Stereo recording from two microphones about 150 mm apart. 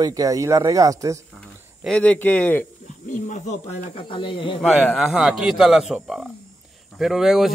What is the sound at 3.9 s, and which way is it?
Speech, 35° left (ahead or behind).